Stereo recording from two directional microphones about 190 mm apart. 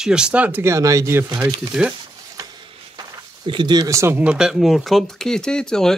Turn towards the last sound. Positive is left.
turn(degrees=5)  # may be behind; listen again after turning